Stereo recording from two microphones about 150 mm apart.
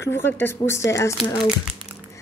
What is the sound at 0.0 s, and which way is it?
Speech, 15° left (ahead or behind).